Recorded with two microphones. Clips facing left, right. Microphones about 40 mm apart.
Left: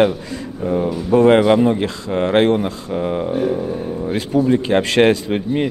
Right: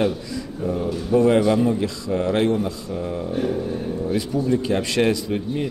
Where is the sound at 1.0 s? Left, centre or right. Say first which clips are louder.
Left 5 dB; left.